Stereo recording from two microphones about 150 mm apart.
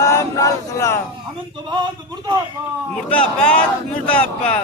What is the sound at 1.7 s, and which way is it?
Speech, 30° right (ahead or behind).